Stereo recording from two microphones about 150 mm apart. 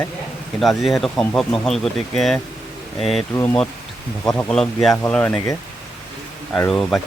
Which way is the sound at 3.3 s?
15° left (ahead or behind).